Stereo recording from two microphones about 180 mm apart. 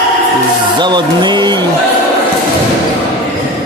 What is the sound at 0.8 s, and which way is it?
Speech, 25° right (ahead or behind).